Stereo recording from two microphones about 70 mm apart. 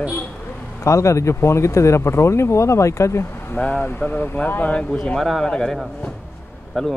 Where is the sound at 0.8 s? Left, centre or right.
Left.